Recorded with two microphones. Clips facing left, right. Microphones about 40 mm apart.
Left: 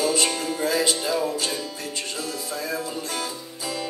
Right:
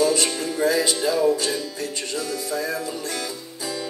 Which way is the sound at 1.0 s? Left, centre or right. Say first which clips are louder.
Right 5 dB; centre.